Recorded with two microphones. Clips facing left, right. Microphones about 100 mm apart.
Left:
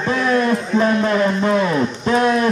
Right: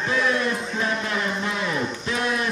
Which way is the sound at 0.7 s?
55° left (ahead or behind).